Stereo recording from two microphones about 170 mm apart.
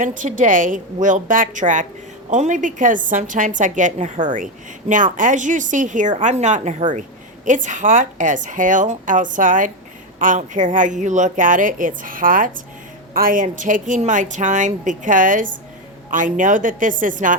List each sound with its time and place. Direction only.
0.0 s a woman's voice: 50° right (ahead or behind)